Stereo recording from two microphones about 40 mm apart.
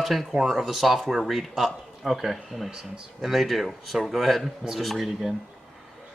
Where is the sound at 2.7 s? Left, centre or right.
Centre.